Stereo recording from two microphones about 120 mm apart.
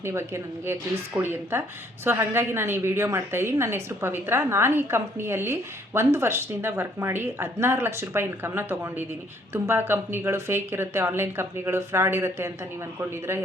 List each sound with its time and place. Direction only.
0.0 s a woman's voice: 20° right (ahead or behind)